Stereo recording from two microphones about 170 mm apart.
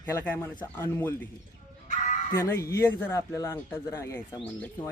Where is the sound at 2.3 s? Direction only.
15° left (ahead or behind).